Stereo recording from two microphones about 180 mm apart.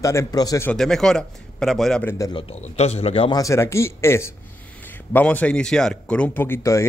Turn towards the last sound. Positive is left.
turn(degrees=15)  # may be behind; listen again after turning